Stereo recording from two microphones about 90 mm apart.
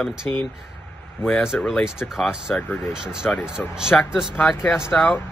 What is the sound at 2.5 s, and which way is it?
Speech, 25° left (ahead or behind).